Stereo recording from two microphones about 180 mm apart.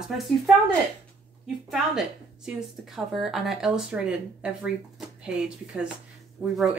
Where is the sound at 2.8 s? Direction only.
Centre (ahead or behind).